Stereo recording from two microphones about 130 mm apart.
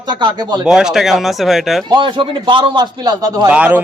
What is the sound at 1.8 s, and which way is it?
A man's voice, 35° right (ahead or behind).